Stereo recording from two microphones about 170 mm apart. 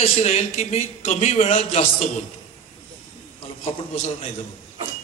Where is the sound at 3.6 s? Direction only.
40° left (ahead or behind).